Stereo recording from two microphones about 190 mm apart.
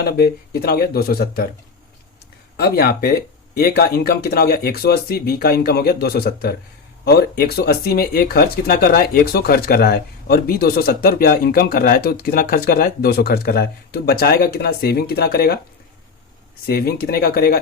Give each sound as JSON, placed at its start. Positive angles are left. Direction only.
{"t": 0.0, "sound": "speech", "side_deg": 55}
{"t": 2.6, "sound": "speech", "side_deg": 55}
{"t": 16.6, "sound": "speech", "side_deg": 55}